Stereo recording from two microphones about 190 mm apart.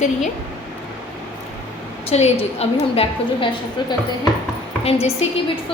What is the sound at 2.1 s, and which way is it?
A woman's voice, 35° left (ahead or behind).